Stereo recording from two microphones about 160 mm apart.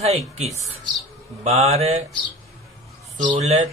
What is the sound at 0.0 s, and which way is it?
Speech, 40° right (ahead or behind).